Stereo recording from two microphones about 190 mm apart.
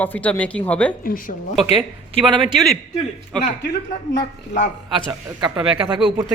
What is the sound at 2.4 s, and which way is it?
Speech, centre (ahead or behind).